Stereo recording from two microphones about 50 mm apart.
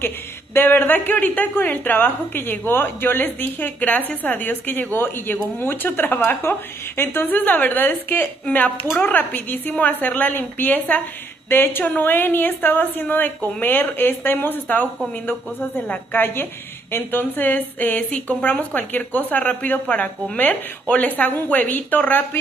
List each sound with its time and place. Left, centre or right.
0.6 s a woman's voice: left
6.5 s a woman's voice: left
7.2 s a woman's voice: left